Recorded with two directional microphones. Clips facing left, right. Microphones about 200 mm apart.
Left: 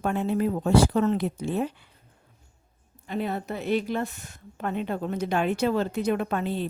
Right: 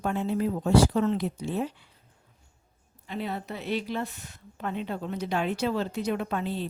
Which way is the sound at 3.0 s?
50° left (ahead or behind).